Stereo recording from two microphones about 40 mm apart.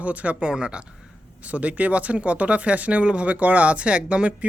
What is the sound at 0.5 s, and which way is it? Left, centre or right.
Speech, right.